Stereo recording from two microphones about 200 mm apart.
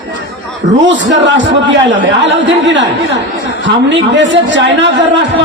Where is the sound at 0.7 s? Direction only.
65° right (ahead or behind).